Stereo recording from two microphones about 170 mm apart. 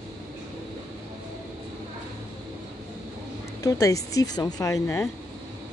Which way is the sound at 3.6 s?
20° left (ahead or behind).